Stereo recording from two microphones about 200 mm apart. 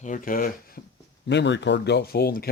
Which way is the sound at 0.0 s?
40° left (ahead or behind).